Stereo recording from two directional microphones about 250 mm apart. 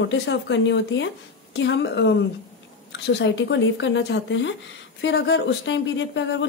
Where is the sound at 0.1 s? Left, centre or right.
Left.